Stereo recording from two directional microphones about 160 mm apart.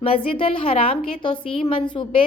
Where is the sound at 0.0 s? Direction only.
35° left (ahead or behind).